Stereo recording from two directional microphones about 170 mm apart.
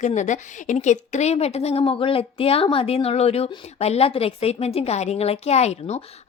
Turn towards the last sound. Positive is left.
turn(degrees=40)  # may be behind; listen again after turning